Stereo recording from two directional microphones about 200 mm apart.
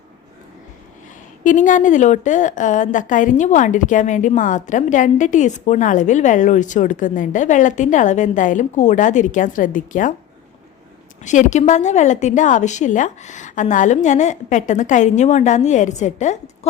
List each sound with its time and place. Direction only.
1.5 s a woman's voice: 40° left (ahead or behind)
11.2 s a woman's voice: 35° left (ahead or behind)